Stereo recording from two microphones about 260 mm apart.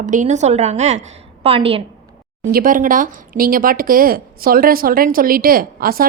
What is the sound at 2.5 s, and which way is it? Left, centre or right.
Speech, right.